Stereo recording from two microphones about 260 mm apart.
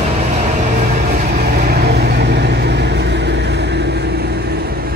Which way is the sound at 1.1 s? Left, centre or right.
Right.